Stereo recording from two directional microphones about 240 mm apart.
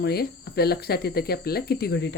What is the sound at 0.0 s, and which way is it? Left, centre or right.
Speech, left.